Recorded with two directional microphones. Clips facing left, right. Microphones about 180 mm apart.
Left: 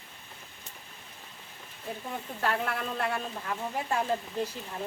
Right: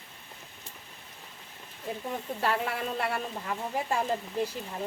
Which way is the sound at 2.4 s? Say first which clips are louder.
Even; 10° right (ahead or behind).